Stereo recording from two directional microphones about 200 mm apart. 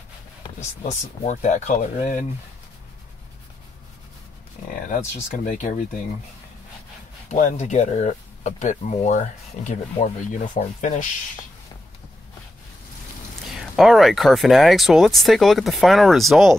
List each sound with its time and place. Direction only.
0.6 s speech: 35° left (ahead or behind)
5.4 s speech: 40° left (ahead or behind)
7.2 s speech: 35° left (ahead or behind)
13.4 s speech: centre (ahead or behind)